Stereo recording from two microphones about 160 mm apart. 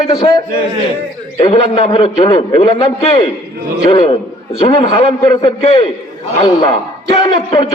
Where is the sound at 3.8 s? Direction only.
25° left (ahead or behind).